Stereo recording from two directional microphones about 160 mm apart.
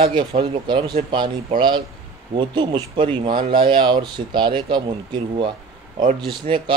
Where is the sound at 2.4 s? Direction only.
30° right (ahead or behind).